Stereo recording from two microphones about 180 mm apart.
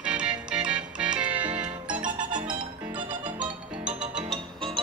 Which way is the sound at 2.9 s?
25° right (ahead or behind).